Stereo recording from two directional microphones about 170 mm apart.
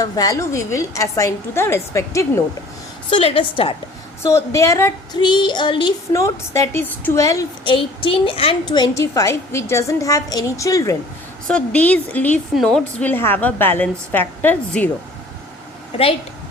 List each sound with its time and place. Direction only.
0.0 s a woman's voice: 20° left (ahead or behind)
3.1 s a woman's voice: 30° left (ahead or behind)
4.2 s a woman's voice: 15° left (ahead or behind)
7.7 s a woman's voice: 30° left (ahead or behind)
11.4 s a woman's voice: 5° left (ahead or behind)
15.9 s a woman's voice: 35° left (ahead or behind)